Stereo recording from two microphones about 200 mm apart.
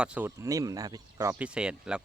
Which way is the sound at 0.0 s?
5° right (ahead or behind).